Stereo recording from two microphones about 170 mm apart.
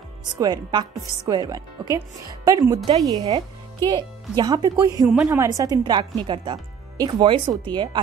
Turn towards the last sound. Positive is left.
turn(degrees=-25)  # may be behind; listen again after turning